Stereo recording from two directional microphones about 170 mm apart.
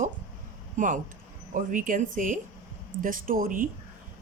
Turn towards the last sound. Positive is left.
turn(degrees=-55)  # may be behind; listen again after turning